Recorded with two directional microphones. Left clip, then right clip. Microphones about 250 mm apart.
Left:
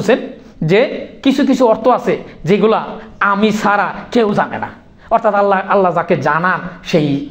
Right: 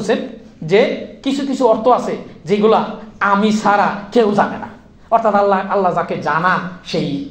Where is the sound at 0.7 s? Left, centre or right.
Left.